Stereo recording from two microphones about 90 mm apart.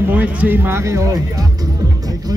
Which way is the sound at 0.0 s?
15° right (ahead or behind).